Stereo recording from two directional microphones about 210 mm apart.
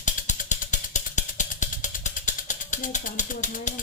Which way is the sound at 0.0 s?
35° left (ahead or behind).